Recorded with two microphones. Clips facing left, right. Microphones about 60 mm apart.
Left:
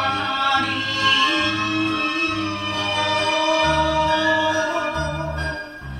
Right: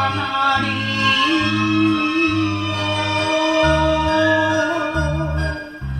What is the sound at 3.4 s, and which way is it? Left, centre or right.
Music, right.